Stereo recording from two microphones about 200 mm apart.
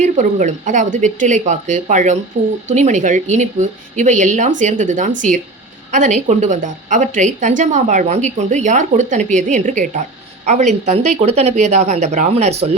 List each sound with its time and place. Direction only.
0.0 s a woman's voice: 40° right (ahead or behind)